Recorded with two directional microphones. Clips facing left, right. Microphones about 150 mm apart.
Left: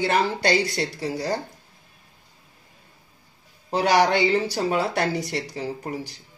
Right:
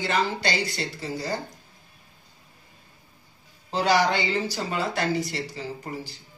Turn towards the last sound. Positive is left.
turn(degrees=65)  # may be behind; listen again after turning